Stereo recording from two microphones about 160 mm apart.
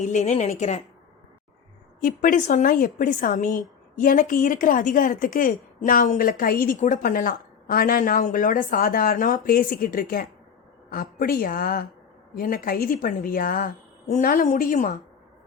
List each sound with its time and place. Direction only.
0.0 s a woman's voice: 45° left (ahead or behind)
2.0 s a woman's voice: 60° left (ahead or behind)